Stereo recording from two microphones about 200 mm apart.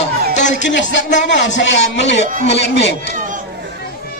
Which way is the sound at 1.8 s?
35° left (ahead or behind).